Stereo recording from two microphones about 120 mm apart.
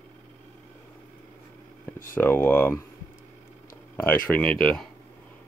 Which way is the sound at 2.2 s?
20° left (ahead or behind).